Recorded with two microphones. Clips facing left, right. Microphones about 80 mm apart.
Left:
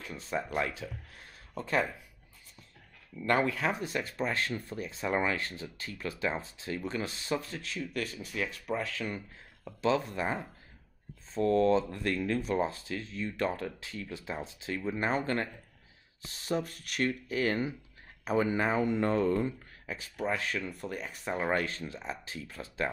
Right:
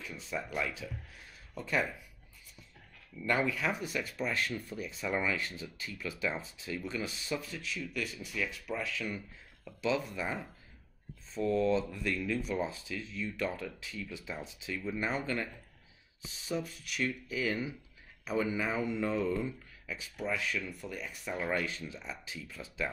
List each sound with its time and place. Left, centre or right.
0.0 s speech: left
1.5 s speech: left
3.3 s speech: left
11.3 s speech: left
16.2 s speech: left
20.9 s speech: left
21.5 s speech: left